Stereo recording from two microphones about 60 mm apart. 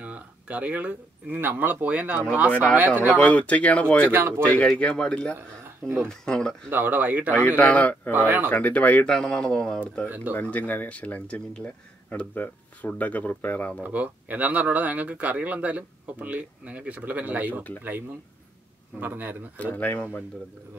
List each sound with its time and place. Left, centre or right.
0.0 s speech: right
3.2 s speech: left
4.0 s a man's voice: right
4.4 s speech: left
6.7 s a man's voice: right
7.5 s speech: left
8.1 s a man's voice: right
8.5 s speech: left
9.0 s speech: centre
10.0 s speech: right
10.4 s speech: left
13.8 s speech: right
18.9 s a man's voice: right
19.6 s speech: left